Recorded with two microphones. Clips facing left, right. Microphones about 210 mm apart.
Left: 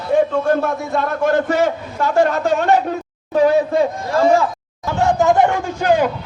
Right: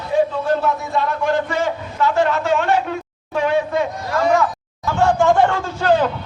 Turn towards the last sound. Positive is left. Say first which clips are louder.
# left 1 dB
turn(degrees=15)  # may be behind; listen again after turning